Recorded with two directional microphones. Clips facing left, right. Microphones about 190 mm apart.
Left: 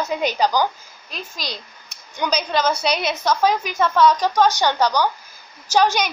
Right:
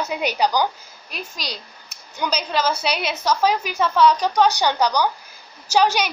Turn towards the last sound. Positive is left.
turn(degrees=-10)  # may be behind; listen again after turning